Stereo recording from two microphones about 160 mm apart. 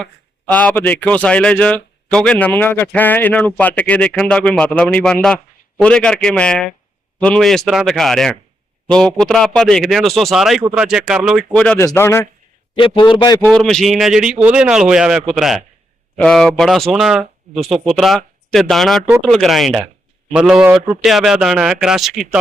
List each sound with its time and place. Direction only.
0.0 s a man's voice: 10° left (ahead or behind)
11.5 s speech: 10° left (ahead or behind)
12.7 s a man's voice: 30° left (ahead or behind)
13.4 s a man's voice: 5° left (ahead or behind)